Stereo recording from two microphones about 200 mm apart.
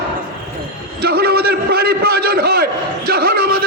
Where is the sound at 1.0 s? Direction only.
50° right (ahead or behind).